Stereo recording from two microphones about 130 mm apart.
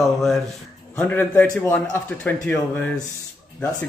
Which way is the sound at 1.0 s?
15° left (ahead or behind).